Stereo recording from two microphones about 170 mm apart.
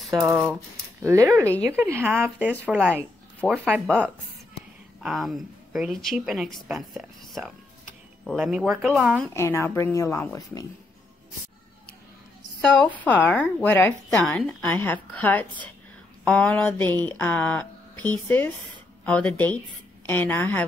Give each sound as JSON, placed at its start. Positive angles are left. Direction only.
{"t": 0.1, "sound": "speech", "side_deg": -20}
{"t": 5.0, "sound": "speech", "side_deg": 0}
{"t": 9.3, "sound": "speech", "side_deg": 15}
{"t": 12.8, "sound": "speech", "side_deg": 10}